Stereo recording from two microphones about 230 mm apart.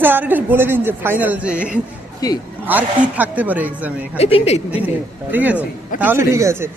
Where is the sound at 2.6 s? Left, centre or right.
Centre.